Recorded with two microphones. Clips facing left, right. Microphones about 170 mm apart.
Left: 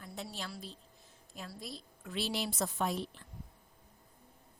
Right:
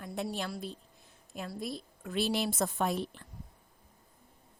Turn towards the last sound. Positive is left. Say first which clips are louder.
# right 3 dB
turn(degrees=-55)  # may be behind; listen again after turning